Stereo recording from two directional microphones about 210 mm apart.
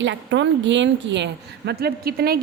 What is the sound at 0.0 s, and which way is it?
A woman's voice, 60° right (ahead or behind).